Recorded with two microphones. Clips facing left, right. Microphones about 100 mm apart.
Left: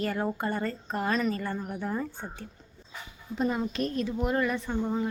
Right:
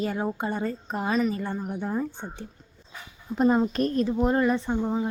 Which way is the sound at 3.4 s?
40° right (ahead or behind).